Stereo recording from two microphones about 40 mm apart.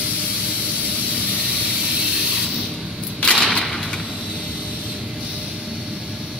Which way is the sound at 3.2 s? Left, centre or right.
Left.